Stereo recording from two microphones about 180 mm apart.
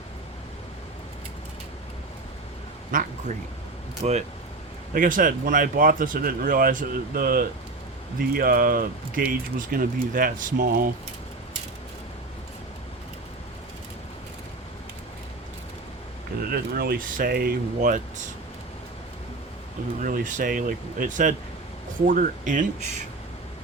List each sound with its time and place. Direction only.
2.9 s speech: 50° right (ahead or behind)
16.4 s speech: 55° right (ahead or behind)
20.0 s speech: 50° right (ahead or behind)